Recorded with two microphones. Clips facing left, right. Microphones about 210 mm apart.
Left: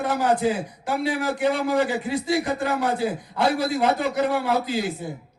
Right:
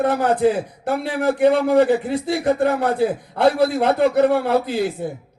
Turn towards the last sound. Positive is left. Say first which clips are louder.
# right 4 dB
turn(degrees=-60)  # may be behind; listen again after turning